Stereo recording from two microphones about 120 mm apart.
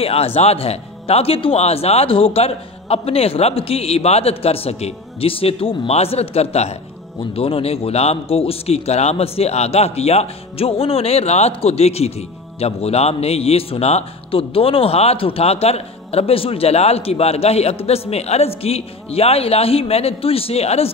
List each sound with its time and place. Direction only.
0.0 s a man's voice: 55° left (ahead or behind)